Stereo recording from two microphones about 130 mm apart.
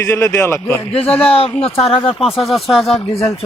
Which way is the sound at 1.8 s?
45° left (ahead or behind).